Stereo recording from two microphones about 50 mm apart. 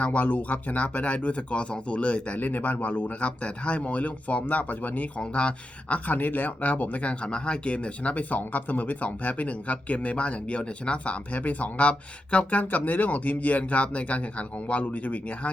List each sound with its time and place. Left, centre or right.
0.0 s speech: left
5.2 s speech: centre